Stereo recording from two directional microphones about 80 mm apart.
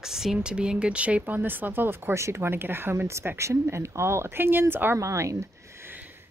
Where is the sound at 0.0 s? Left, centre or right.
Centre; by 4.9 s right.